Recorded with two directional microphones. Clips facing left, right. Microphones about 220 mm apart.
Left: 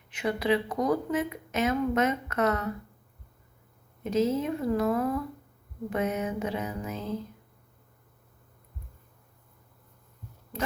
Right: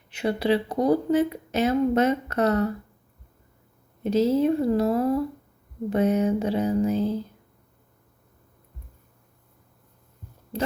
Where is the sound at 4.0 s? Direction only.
35° right (ahead or behind).